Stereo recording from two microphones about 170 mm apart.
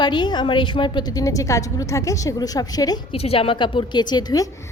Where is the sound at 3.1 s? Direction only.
35° left (ahead or behind).